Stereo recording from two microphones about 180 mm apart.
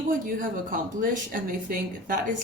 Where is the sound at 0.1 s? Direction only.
50° right (ahead or behind).